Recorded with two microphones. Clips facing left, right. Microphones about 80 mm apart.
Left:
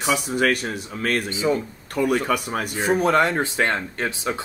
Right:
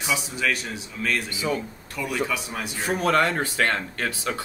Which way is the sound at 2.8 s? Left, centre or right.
Left.